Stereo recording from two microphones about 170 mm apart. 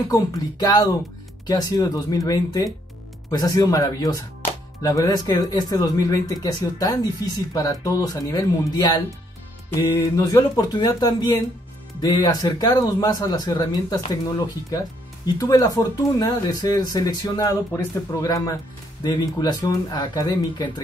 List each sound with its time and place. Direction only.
0.1 s speech: 20° left (ahead or behind)